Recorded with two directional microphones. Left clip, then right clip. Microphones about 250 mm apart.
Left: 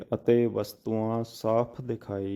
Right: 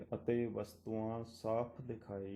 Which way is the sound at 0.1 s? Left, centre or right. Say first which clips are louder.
Left 14 dB; left.